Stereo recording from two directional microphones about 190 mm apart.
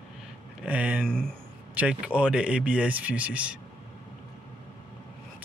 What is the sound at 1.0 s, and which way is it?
Speech, 5° left (ahead or behind).